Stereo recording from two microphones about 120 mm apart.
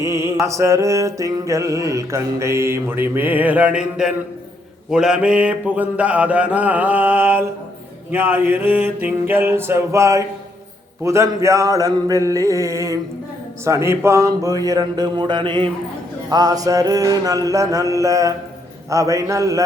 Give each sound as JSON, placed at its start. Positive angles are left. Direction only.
{"t": 0.0, "sound": "mantra", "side_deg": -25}
{"t": 13.7, "sound": "speech", "side_deg": -20}
{"t": 16.3, "sound": "mantra", "side_deg": -30}